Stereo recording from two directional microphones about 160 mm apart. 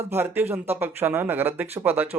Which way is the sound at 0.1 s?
15° right (ahead or behind).